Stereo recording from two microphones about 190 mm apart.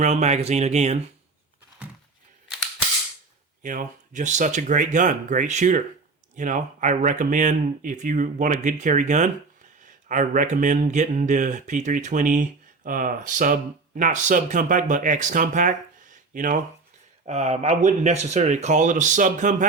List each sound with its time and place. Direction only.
0.0 s speech: 35° right (ahead or behind)
1.8 s a sound: 5° right (ahead or behind)
3.6 s speech: 40° right (ahead or behind)